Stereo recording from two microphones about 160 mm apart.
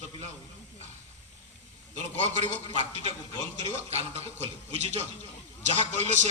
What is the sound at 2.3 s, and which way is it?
A man's voice, 45° right (ahead or behind).